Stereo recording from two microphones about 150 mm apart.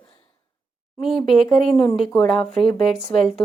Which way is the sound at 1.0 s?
Centre (ahead or behind).